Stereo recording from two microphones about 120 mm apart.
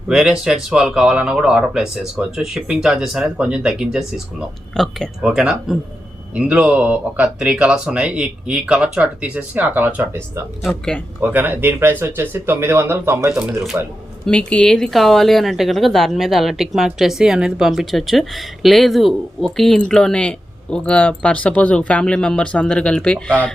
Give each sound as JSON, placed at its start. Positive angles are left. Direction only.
{"t": 0.1, "sound": "a woman's voice", "side_deg": -5}
{"t": 10.6, "sound": "a woman's voice", "side_deg": 5}
{"t": 11.2, "sound": "speech", "side_deg": -15}
{"t": 14.3, "sound": "a woman's voice", "side_deg": 10}